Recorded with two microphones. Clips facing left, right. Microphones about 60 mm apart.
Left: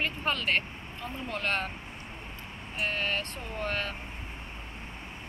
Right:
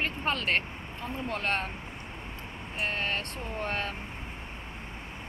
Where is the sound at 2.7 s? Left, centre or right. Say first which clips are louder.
Left 1 dB; right.